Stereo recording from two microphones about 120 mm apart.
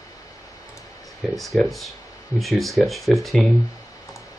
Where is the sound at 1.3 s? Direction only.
Centre (ahead or behind).